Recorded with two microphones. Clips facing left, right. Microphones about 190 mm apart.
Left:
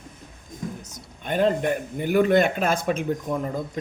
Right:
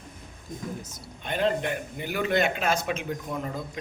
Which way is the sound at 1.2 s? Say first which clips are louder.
Left 5 dB; 45° left (ahead or behind).